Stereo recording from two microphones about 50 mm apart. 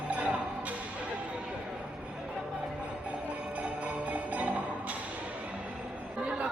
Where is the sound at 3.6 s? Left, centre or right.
Right.